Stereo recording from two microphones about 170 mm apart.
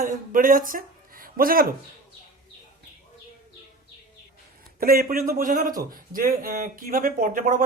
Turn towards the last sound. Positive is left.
turn(degrees=-50)  # may be behind; listen again after turning